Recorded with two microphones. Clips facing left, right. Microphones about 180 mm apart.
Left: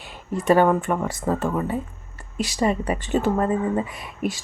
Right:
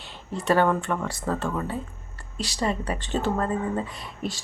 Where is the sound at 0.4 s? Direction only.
15° left (ahead or behind).